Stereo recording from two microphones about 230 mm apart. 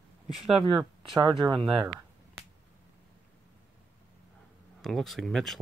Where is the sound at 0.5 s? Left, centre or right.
Centre.